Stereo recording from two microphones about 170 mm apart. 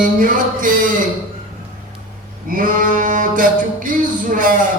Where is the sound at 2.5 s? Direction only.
50° right (ahead or behind).